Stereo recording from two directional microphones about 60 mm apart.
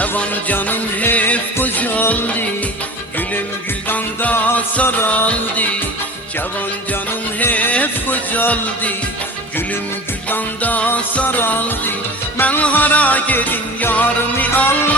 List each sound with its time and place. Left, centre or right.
0.2 s music: left
3.8 s music: left
6.9 s music: left
10.2 s music: left
11.3 s music: left